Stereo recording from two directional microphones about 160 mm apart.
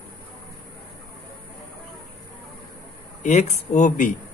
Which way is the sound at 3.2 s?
50° left (ahead or behind).